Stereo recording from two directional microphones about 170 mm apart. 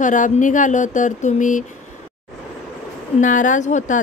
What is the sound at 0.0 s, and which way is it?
Speech, 50° left (ahead or behind).